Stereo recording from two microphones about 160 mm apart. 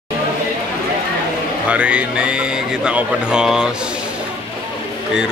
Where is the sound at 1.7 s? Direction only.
10° right (ahead or behind).